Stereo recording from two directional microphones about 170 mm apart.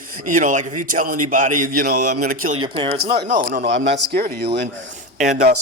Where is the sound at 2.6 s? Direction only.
35° right (ahead or behind).